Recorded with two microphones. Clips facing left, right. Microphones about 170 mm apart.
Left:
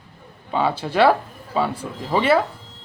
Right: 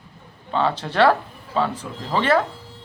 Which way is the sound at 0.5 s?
10° left (ahead or behind).